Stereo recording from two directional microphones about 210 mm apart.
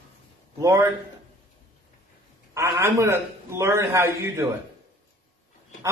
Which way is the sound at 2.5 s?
10° right (ahead or behind).